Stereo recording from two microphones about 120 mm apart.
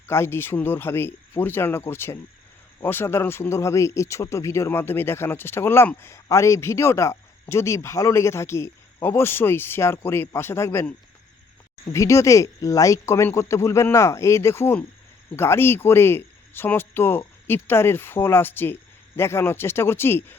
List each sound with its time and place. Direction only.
0.1 s speech: 20° left (ahead or behind)
11.9 s speech: 25° left (ahead or behind)